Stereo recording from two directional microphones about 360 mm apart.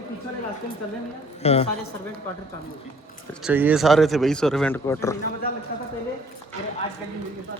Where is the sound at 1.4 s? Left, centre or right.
Centre.